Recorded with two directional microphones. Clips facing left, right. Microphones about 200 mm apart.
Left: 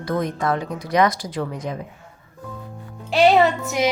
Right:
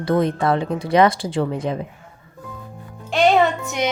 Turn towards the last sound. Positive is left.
turn(degrees=0)  # may be behind; listen again after turning